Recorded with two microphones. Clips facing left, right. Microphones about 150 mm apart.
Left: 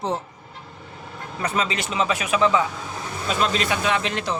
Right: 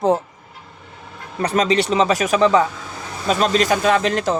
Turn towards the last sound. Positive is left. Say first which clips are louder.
# right 7 dB
turn(degrees=-45)  # may be behind; listen again after turning